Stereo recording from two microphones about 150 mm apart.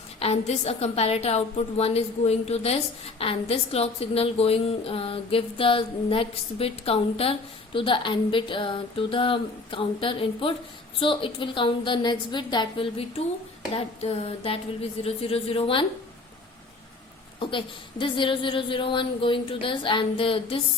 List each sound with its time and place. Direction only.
0.2 s a woman's voice: 45° left (ahead or behind)
18.0 s a woman's voice: 35° left (ahead or behind)